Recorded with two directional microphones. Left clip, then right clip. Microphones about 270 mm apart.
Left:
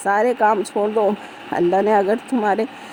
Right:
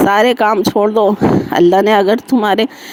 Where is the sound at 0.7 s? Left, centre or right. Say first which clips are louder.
Right 7 dB; right.